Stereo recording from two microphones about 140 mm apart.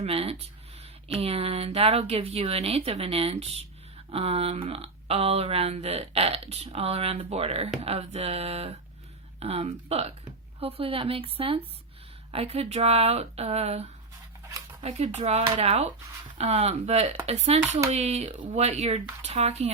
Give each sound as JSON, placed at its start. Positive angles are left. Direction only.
{"t": 0.0, "sound": "speech", "side_deg": -45}